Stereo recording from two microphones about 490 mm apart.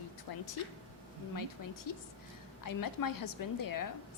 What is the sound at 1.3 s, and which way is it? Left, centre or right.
A woman's voice, left.